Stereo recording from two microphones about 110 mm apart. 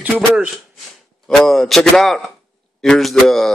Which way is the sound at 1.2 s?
Centre (ahead or behind).